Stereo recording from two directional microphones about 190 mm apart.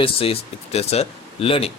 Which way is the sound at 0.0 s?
30° left (ahead or behind).